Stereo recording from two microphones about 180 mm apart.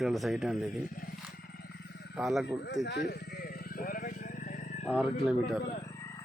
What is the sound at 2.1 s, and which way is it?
Speech, 5° right (ahead or behind).